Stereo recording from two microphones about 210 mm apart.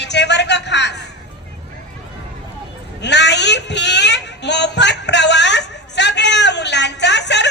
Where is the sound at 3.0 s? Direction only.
55° left (ahead or behind).